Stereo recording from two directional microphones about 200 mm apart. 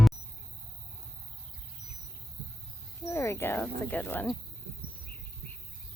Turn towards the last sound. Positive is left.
turn(degrees=10)  # may be behind; listen again after turning